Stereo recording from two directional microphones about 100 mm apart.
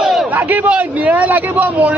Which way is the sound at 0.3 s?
15° right (ahead or behind).